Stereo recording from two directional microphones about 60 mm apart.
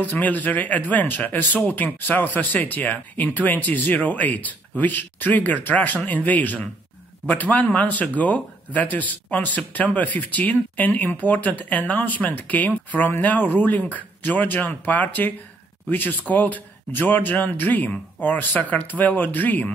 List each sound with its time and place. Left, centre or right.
0.0 s speech: left